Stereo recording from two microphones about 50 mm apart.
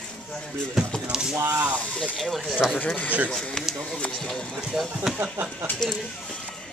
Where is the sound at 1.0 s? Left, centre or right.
Centre.